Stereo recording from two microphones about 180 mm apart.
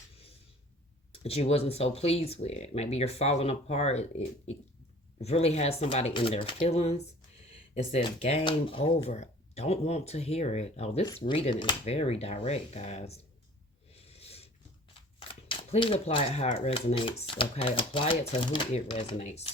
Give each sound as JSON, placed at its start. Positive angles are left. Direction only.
{"t": 1.2, "sound": "speech", "side_deg": 35}
{"t": 11.0, "sound": "speech", "side_deg": 25}
{"t": 13.9, "sound": "snort", "side_deg": 35}
{"t": 15.2, "sound": "speech", "side_deg": 30}